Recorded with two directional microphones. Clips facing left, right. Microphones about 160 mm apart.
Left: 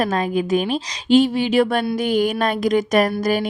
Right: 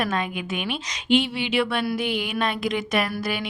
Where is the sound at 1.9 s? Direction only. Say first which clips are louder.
Left 7 dB; 45° left (ahead or behind).